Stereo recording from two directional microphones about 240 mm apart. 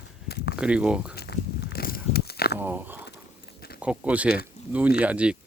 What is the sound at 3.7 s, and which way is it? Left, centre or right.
Speech, centre.